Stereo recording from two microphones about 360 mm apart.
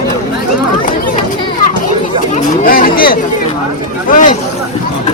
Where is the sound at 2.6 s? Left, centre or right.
Left.